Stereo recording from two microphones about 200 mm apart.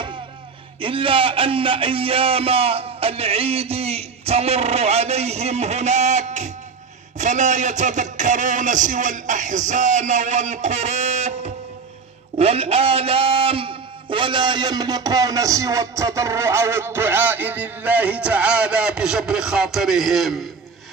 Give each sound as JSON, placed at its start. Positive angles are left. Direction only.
{"t": 0.7, "sound": "a man's voice", "side_deg": -25}